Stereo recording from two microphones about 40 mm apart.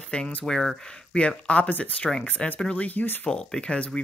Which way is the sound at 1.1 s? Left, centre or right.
Left.